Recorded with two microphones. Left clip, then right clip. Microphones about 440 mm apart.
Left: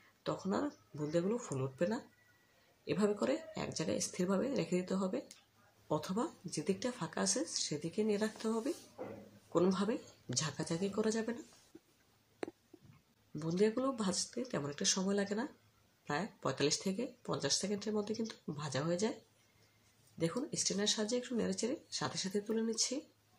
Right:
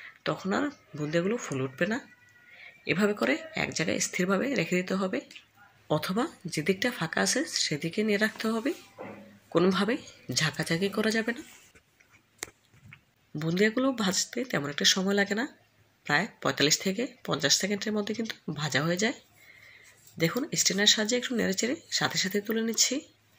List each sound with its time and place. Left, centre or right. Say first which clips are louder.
0.2 s speech: right 8 dB; right
13.4 s speech: right 7 dB; right
20.2 s speech: right 9 dB; right